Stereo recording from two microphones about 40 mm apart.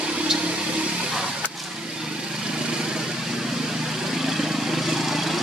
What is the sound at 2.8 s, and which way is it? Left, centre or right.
Vehicle, centre.